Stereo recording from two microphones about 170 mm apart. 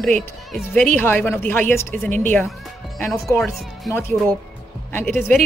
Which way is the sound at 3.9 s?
15° left (ahead or behind).